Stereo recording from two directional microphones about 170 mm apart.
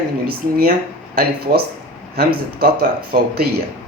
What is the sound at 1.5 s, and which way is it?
Speech, 50° right (ahead or behind).